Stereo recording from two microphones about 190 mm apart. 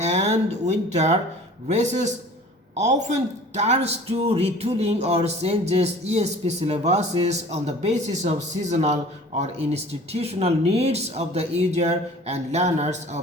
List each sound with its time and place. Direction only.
0.0 s a man's voice: 35° right (ahead or behind)